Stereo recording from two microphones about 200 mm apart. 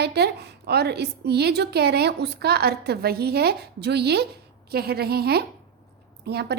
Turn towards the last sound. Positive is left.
turn(degrees=-55)  # may be behind; listen again after turning